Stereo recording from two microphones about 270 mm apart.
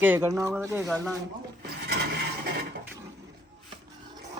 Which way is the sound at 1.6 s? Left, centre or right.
Right.